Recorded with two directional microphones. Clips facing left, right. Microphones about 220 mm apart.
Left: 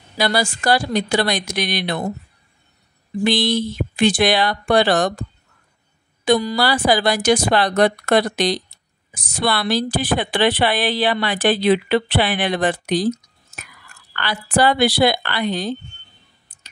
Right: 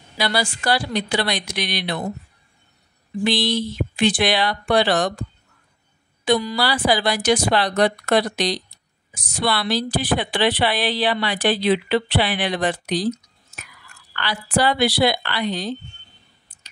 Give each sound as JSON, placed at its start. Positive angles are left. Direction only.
{"t": 0.2, "sound": "a woman's voice", "side_deg": 45}
{"t": 3.3, "sound": "a woman's voice", "side_deg": 50}
{"t": 6.2, "sound": "a woman's voice", "side_deg": 45}
{"t": 14.1, "sound": "a woman's voice", "side_deg": 50}